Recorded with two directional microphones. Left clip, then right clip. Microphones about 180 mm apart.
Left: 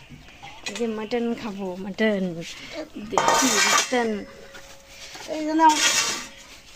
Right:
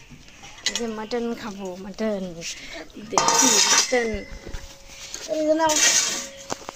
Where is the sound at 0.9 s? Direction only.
10° left (ahead or behind).